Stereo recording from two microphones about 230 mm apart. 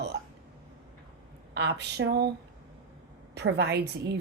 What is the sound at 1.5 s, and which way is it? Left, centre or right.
Speech, right.